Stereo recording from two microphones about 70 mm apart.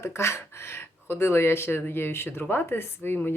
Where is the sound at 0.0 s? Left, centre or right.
Left.